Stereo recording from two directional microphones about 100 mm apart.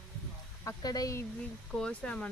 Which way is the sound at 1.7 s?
10° left (ahead or behind).